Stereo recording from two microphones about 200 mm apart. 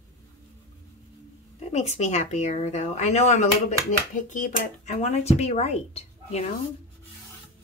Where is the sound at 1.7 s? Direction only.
35° left (ahead or behind).